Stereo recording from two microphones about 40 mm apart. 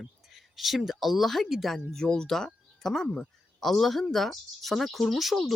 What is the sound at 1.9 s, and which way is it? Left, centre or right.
A woman's voice, centre.